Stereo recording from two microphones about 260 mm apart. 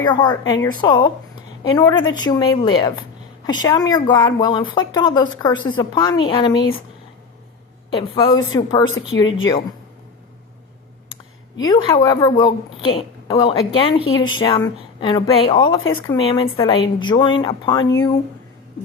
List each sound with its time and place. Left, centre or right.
0.1 s a woman's voice: centre
7.9 s a woman's voice: centre
9.1 s a woman's voice: left
11.7 s a woman's voice: centre